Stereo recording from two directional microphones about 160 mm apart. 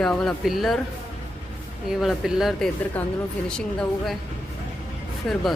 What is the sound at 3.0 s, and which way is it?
Speech, 10° left (ahead or behind).